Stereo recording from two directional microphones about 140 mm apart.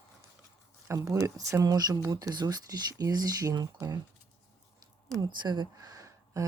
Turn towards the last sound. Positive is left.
turn(degrees=-25)  # may be behind; listen again after turning